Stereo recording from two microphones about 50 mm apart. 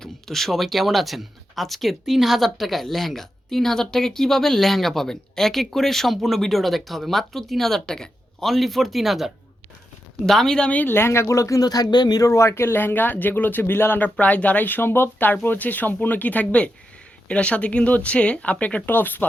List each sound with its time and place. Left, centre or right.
0.0 s speech: centre
8.4 s speech: centre
10.2 s speech: centre
10.7 s speech: left
10.9 s speech: left
12.7 s speech: left
14.2 s speech: left
15.4 s speech: left
18.9 s speech: left